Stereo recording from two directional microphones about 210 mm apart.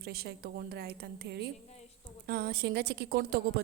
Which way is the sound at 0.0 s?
45° right (ahead or behind).